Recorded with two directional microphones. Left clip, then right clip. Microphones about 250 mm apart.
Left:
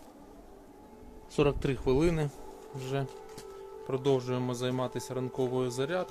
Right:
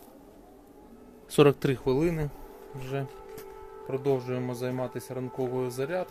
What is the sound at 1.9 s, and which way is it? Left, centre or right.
Speech, centre.